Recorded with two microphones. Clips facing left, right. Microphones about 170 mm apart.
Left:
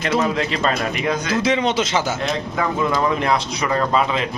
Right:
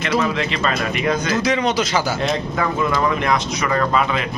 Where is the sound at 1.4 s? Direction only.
25° left (ahead or behind).